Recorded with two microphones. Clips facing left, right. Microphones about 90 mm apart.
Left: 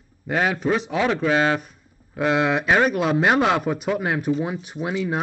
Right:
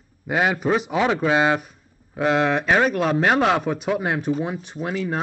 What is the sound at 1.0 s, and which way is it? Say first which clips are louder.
Speech: even; 15° right (ahead or behind).